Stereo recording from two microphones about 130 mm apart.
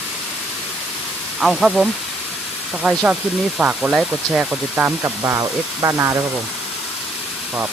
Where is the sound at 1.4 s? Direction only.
Centre (ahead or behind); by 6.1 s 25° right (ahead or behind).